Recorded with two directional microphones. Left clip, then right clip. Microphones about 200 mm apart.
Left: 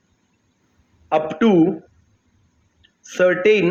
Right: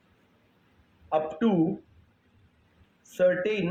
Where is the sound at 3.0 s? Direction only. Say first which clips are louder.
Left 9 dB; 35° left (ahead or behind).